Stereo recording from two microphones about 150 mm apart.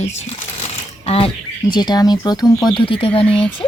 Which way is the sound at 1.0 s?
40° left (ahead or behind).